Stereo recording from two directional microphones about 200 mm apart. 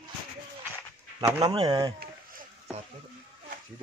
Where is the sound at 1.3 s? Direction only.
15° right (ahead or behind).